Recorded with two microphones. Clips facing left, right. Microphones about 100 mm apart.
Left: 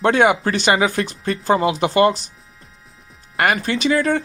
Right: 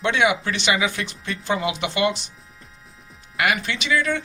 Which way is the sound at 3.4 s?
40° left (ahead or behind).